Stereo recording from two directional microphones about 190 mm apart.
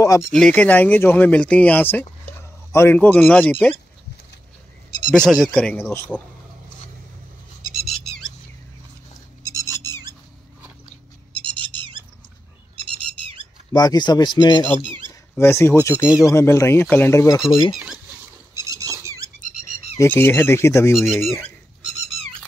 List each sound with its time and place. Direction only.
0.0 s speech: 15° left (ahead or behind)
0.3 s speech: 5° left (ahead or behind)
5.2 s speech: 5° right (ahead or behind)
7.6 s a sound: centre (ahead or behind)
11.3 s owl: 25° right (ahead or behind)
13.7 s speech: 20° left (ahead or behind)
14.8 s a sound: 25° right (ahead or behind)
15.3 s speech: 10° left (ahead or behind)
17.7 s a sound: 5° right (ahead or behind)
18.7 s a sound: 15° right (ahead or behind)
20.0 s speech: 10° left (ahead or behind)
20.9 s speech: centre (ahead or behind)